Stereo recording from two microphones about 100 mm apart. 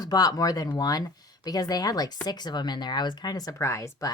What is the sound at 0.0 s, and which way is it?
Speech, 40° left (ahead or behind).